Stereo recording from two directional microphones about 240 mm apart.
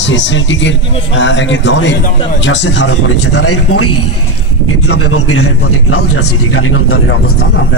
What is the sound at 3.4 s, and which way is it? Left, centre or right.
A man's voice, left.